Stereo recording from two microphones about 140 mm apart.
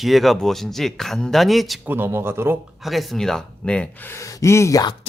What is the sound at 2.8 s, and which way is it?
Speech, centre (ahead or behind).